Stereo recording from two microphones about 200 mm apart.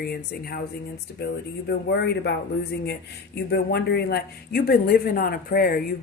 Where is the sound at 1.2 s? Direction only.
60° left (ahead or behind).